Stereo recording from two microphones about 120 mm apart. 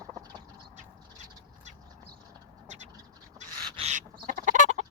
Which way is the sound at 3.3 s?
75° right (ahead or behind).